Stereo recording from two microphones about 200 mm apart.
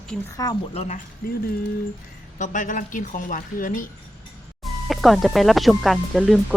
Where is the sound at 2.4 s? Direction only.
40° left (ahead or behind).